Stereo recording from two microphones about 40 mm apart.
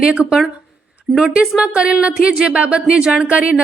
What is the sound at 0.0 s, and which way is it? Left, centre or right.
Speech, right.